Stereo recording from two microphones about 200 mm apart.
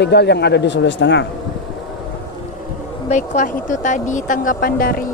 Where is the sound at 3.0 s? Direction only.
35° left (ahead or behind).